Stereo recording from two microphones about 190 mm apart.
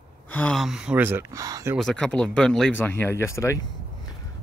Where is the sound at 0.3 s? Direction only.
5° left (ahead or behind); by 1.8 s 15° right (ahead or behind).